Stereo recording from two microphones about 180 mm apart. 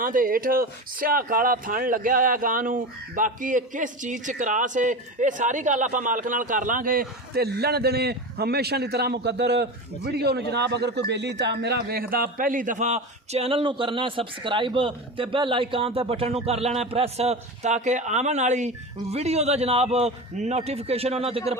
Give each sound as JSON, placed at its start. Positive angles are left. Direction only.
{"t": 0.0, "sound": "a man's voice", "side_deg": -50}